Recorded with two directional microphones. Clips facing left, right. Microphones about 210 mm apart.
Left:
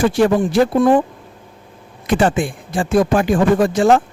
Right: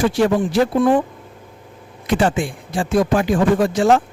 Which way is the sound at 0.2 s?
50° left (ahead or behind).